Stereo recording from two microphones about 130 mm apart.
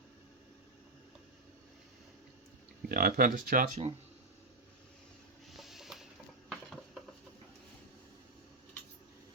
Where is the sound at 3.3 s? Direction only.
90° right.